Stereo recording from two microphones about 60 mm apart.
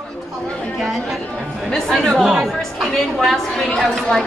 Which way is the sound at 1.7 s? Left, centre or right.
Centre.